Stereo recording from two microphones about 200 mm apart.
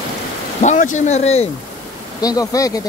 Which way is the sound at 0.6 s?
40° left (ahead or behind).